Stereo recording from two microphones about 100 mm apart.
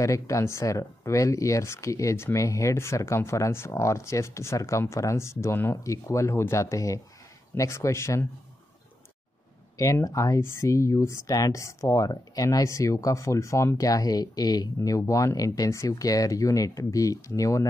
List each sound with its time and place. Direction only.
0.0 s speech: 30° left (ahead or behind)
9.8 s speech: 25° left (ahead or behind)
10.0 s speech: 35° left (ahead or behind)